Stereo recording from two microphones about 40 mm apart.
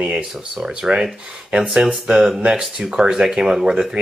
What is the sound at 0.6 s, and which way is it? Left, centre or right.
Speech, centre.